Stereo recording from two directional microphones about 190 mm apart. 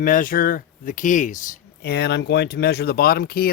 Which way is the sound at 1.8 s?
60° left (ahead or behind).